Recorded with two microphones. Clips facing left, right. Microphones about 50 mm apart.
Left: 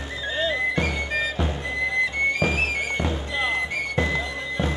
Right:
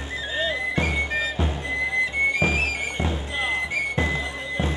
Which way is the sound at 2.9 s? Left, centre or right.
Centre.